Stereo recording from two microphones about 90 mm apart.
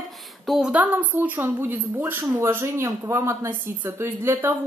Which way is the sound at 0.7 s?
15° right (ahead or behind).